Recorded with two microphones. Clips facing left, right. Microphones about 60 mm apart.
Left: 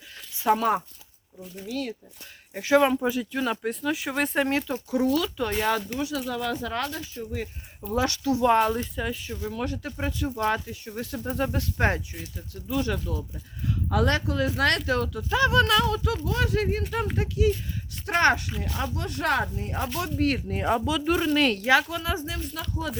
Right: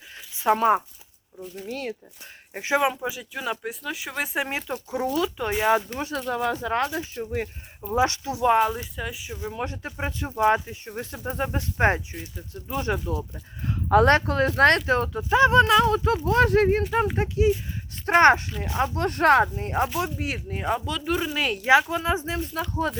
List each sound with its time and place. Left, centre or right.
0.5 s speech: right
1.4 s speech: centre
1.6 s speech: right
2.5 s speech: right
2.8 s speech: centre
4.7 s speech: right
5.7 s speech: right
6.3 s speech: right
7.8 s speech: centre
8.4 s speech: centre; by 18.9 s right
18.9 s speech: right
20.1 s speech: centre
21.7 s speech: right